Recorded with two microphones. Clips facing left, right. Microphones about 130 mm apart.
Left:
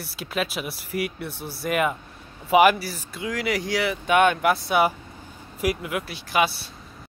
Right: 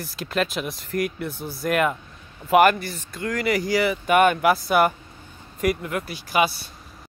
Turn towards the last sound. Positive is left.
turn(degrees=0)  # may be behind; listen again after turning